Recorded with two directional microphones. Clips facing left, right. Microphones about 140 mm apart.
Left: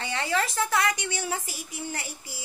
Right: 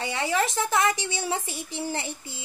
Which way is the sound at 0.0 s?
15° right (ahead or behind).